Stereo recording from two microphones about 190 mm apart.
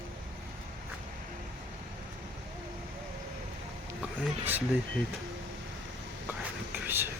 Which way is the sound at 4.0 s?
10° right (ahead or behind).